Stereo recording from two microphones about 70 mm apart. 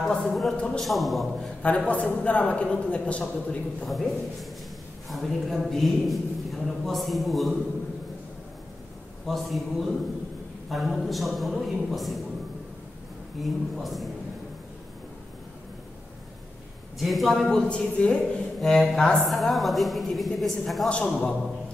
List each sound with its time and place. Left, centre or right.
0.2 s a man's voice: centre
1.4 s a man's voice: centre
3.8 s a man's voice: centre
9.3 s a man's voice: centre
13.4 s a man's voice: centre
17.0 s a man's voice: centre